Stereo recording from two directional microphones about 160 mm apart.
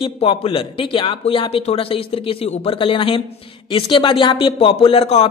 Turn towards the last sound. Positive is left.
turn(degrees=40)  # may be behind; listen again after turning